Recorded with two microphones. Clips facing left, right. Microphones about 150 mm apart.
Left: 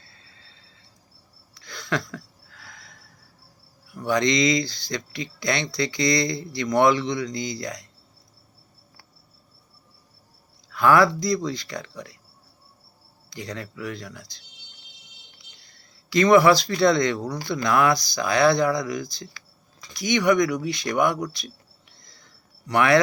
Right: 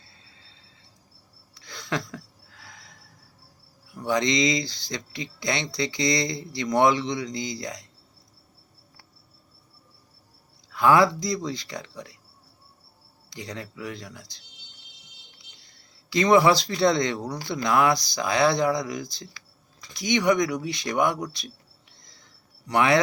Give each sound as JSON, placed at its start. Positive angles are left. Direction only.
{"t": 1.5, "sound": "a sound", "side_deg": -25}
{"t": 3.9, "sound": "speech", "side_deg": -20}
{"t": 10.7, "sound": "speech", "side_deg": -20}
{"t": 13.3, "sound": "speech", "side_deg": -20}
{"t": 15.6, "sound": "speech", "side_deg": -20}
{"t": 22.0, "sound": "a sound", "side_deg": -20}